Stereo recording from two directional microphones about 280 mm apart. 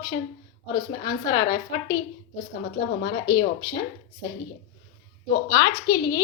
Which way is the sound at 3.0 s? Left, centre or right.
Centre.